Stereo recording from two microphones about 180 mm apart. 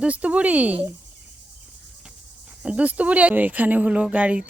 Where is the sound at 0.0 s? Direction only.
5° right (ahead or behind).